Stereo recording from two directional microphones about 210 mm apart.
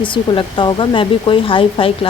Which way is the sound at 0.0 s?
25° left (ahead or behind).